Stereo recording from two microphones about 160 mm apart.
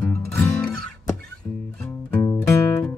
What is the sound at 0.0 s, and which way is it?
Music, 15° left (ahead or behind).